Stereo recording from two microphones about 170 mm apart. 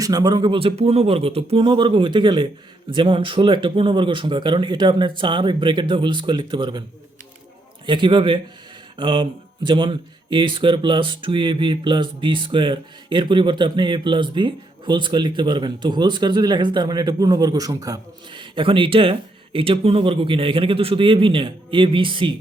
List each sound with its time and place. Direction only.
0.0 s speech: 20° right (ahead or behind)
7.9 s speech: 30° right (ahead or behind)
9.0 s a sound: 30° right (ahead or behind)
9.6 s a man's voice: 30° right (ahead or behind)